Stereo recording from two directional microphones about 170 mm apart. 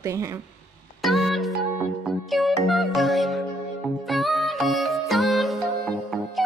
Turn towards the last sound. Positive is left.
turn(degrees=0)  # may be behind; listen again after turning